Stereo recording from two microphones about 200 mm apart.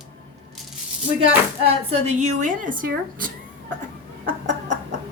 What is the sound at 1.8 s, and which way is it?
Speech, 35° right (ahead or behind).